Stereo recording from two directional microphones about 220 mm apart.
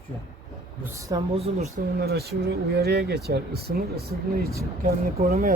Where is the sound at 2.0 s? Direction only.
45° right (ahead or behind).